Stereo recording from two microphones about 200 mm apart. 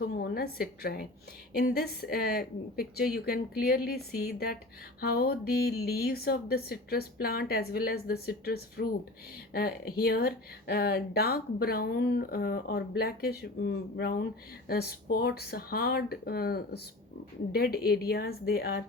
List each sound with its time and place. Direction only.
0.2 s a woman's voice: 50° left (ahead or behind)